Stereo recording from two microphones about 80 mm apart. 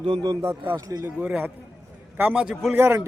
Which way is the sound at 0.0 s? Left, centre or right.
Right.